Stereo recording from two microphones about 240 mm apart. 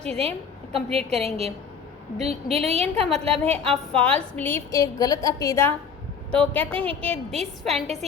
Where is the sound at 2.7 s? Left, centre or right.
Right.